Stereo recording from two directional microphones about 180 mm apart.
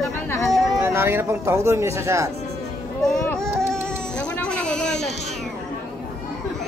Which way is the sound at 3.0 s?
5° left (ahead or behind).